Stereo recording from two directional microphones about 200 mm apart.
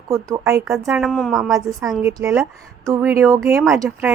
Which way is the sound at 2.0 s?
10° right (ahead or behind).